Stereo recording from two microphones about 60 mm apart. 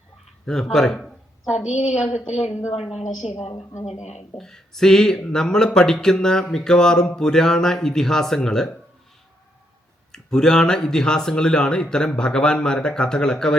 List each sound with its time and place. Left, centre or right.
0.4 s speech: centre
1.5 s a woman's voice: centre
3.7 s speech: left
4.4 s speech: centre
10.1 s speech: centre